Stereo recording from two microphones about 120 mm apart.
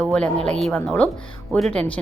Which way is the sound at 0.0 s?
10° left (ahead or behind).